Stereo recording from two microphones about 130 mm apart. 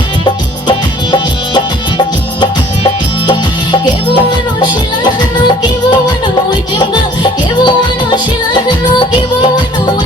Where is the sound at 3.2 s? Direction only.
40° left (ahead or behind).